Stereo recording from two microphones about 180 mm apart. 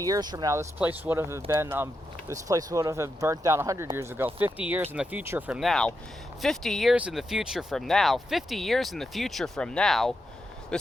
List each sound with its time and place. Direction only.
0.0 s speech: 20° right (ahead or behind)
5.5 s speech: centre (ahead or behind)